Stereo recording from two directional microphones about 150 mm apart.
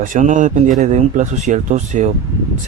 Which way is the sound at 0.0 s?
60° right (ahead or behind).